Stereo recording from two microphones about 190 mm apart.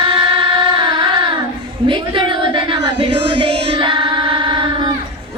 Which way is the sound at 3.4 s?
25° right (ahead or behind).